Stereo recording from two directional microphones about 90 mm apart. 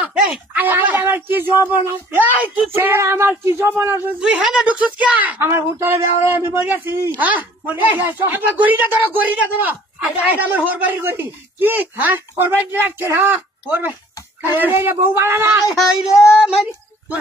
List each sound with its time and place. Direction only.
0.0 s speech: 20° right (ahead or behind)
4.2 s a woman's voice: 10° right (ahead or behind)
5.4 s speech: 30° right (ahead or behind)
13.0 s speech: 25° right (ahead or behind)
15.7 s child singing: 5° right (ahead or behind)